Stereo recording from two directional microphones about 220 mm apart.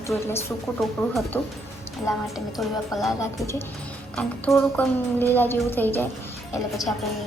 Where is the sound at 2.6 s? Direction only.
Centre (ahead or behind).